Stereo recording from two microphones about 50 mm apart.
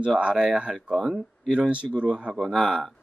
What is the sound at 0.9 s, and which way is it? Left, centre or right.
Speech, centre.